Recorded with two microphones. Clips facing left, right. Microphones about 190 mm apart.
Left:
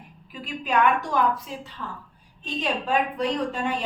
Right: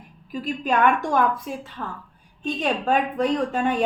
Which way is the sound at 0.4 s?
45° right (ahead or behind).